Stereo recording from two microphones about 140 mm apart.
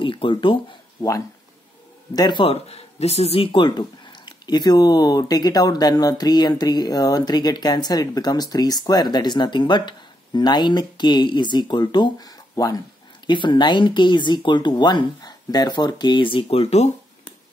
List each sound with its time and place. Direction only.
0.0 s speech: 35° left (ahead or behind)
2.4 s speech: 45° left (ahead or behind)